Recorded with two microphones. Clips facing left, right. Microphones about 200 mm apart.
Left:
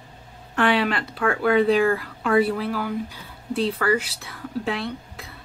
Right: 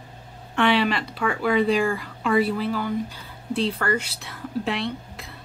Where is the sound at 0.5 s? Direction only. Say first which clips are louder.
Even; 5° left (ahead or behind).